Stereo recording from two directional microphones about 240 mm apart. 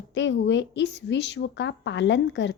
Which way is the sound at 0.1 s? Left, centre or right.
Left.